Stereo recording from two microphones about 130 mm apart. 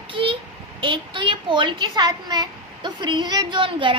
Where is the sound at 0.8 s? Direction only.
40° right (ahead or behind).